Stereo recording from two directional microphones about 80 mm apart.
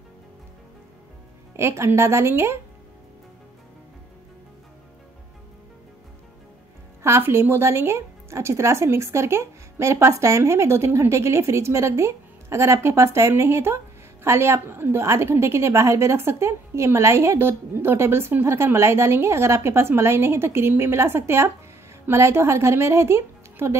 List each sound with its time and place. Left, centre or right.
1.6 s a woman's voice: right
7.0 s a woman's voice: right